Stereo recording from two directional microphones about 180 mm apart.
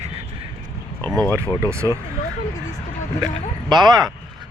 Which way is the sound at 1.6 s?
15° right (ahead or behind).